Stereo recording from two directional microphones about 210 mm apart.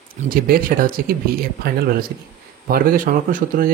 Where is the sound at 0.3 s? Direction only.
40° right (ahead or behind).